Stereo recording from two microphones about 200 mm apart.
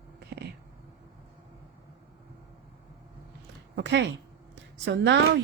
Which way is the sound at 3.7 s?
60° right (ahead or behind).